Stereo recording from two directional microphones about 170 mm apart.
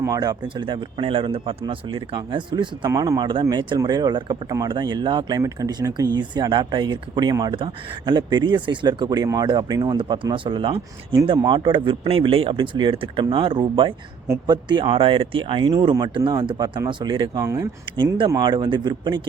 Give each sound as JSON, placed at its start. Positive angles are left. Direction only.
{"t": 0.0, "sound": "speech", "side_deg": -20}